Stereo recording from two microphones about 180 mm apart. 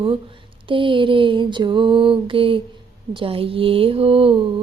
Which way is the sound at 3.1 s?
30° right (ahead or behind).